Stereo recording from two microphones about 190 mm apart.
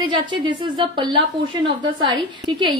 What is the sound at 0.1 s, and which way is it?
A woman's voice, 25° right (ahead or behind).